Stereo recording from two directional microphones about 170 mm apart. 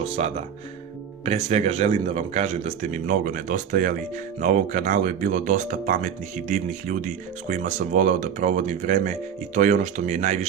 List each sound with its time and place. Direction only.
0.0 s a man's voice: 40° right (ahead or behind)